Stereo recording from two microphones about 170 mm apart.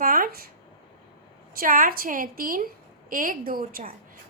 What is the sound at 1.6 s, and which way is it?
A woman's voice, 55° right (ahead or behind).